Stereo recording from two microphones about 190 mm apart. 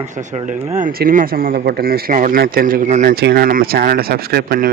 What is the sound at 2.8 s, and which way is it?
Speech, 35° right (ahead or behind).